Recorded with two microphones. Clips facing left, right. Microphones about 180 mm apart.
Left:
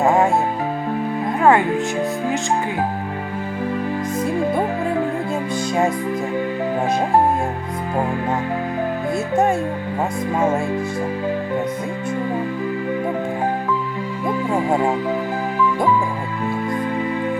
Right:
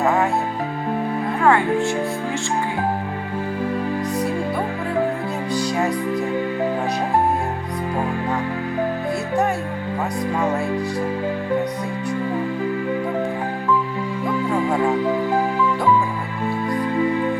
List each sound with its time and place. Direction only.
0.0 s music: 20° left (ahead or behind)
1.4 s music: 20° left (ahead or behind)
5.5 s music: 20° left (ahead or behind)
14.7 s music: 20° left (ahead or behind)